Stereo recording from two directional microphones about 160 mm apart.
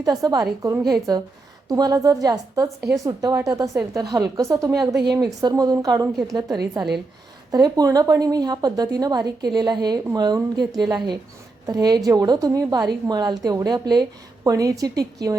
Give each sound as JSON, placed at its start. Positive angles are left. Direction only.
{"t": 0.0, "sound": "a woman's voice", "side_deg": -25}